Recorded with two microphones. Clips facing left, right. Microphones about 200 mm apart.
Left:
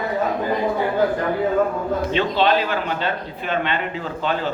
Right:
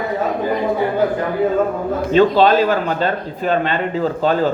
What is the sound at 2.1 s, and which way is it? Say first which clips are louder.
Speech: right 8 dB; 40° right (ahead or behind).